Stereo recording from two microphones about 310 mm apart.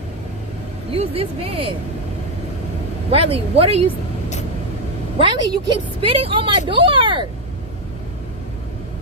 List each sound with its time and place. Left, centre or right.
0.9 s a woman's voice: centre
3.1 s speech: centre
5.1 s a woman's voice: centre